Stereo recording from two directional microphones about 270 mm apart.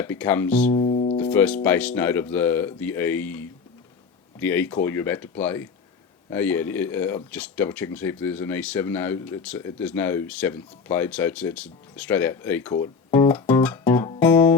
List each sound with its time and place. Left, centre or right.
0.0 s speech: centre
0.7 s music: left
1.2 s speech: centre